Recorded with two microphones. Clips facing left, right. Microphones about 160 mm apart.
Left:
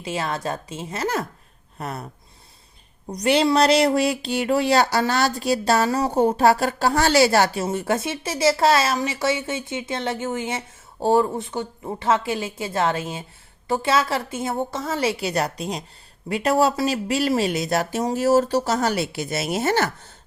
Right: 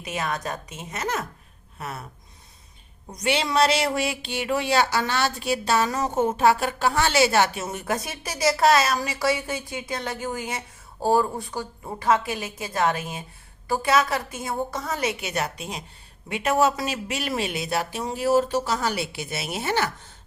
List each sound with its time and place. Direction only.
0.0 s a woman's voice: 30° left (ahead or behind)
3.1 s a woman's voice: 35° left (ahead or behind)